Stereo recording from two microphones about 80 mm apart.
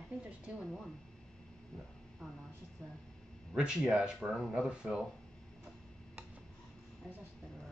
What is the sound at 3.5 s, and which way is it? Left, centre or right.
Speech, centre.